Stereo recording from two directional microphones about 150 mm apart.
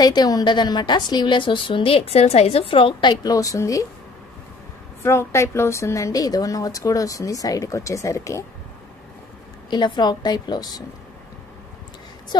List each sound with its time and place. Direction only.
0.0 s a woman's voice: 25° left (ahead or behind)
5.0 s a woman's voice: 20° left (ahead or behind)
9.7 s a woman's voice: 30° left (ahead or behind)